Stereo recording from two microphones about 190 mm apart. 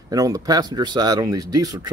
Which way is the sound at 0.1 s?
20° right (ahead or behind).